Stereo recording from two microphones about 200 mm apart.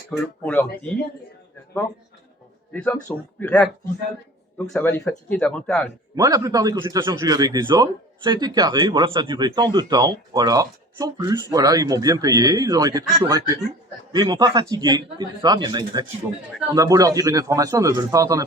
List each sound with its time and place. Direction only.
0.1 s a man's voice: 5° left (ahead or behind)
2.7 s a man's voice: 10° left (ahead or behind)
6.1 s speech: 15° right (ahead or behind)